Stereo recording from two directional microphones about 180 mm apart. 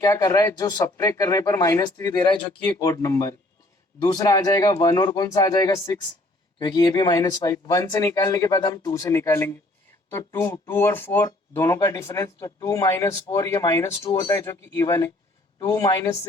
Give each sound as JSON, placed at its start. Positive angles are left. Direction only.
{"t": 0.0, "sound": "speech", "side_deg": 20}
{"t": 2.1, "sound": "speech", "side_deg": 25}